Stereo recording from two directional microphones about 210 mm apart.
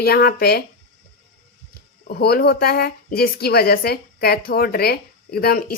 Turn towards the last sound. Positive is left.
turn(degrees=45)  # may be behind; listen again after turning